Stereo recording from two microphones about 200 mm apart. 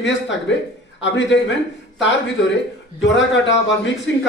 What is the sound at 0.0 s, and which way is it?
Speech, 65° left (ahead or behind).